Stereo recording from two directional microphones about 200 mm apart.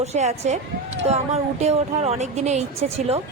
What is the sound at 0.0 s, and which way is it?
A woman's voice, 35° right (ahead or behind).